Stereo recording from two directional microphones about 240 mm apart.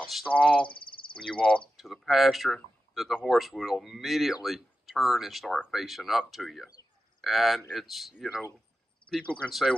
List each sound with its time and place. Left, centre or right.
0.0 s speech: centre
0.7 s a sound: left
1.1 s speech: centre